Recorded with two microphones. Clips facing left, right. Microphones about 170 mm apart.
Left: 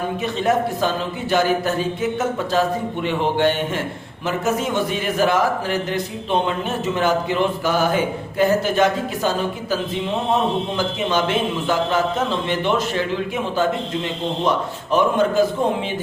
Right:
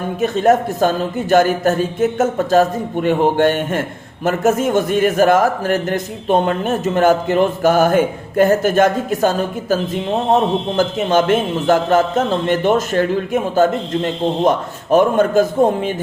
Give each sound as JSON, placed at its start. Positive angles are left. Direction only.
{"t": 0.2, "sound": "a man's voice", "side_deg": -45}